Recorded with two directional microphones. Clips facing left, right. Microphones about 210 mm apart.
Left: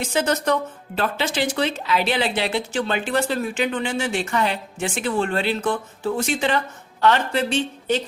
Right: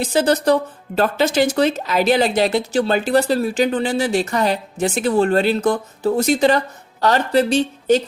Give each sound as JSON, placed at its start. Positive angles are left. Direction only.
{"t": 0.0, "sound": "speech", "side_deg": -35}